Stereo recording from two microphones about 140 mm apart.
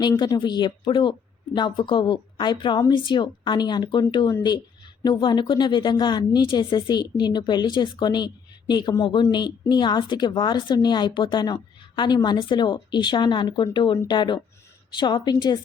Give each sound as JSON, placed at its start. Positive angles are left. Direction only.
{"t": 0.2, "sound": "a woman's voice", "side_deg": 30}